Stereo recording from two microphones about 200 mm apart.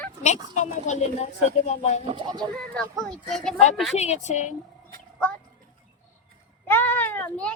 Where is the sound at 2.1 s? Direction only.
20° right (ahead or behind).